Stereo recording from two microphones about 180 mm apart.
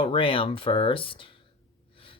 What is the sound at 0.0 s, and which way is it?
Speech, 30° left (ahead or behind).